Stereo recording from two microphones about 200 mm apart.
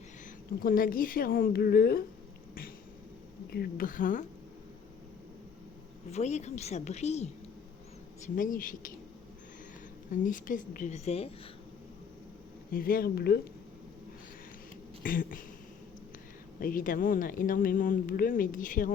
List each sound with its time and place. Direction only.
0.6 s speech: 45° left (ahead or behind)
3.5 s speech: 50° left (ahead or behind)
6.1 s a woman's voice: 35° left (ahead or behind)
8.4 s speech: 45° left (ahead or behind)
10.1 s a woman's voice: 40° left (ahead or behind)
12.7 s speech: 45° left (ahead or behind)
15.0 s speech: 45° left (ahead or behind)
16.6 s speech: 45° left (ahead or behind)